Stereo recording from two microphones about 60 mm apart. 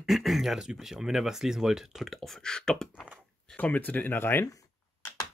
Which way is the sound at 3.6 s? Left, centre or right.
Left.